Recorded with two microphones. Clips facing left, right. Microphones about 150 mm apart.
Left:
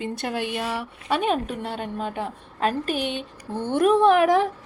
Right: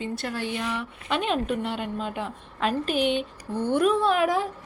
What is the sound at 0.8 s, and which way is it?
A woman's voice, 45° left (ahead or behind).